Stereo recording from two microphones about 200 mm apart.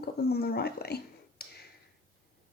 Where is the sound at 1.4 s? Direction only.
50° left (ahead or behind).